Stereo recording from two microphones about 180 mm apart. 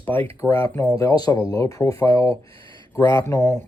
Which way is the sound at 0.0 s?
10° left (ahead or behind).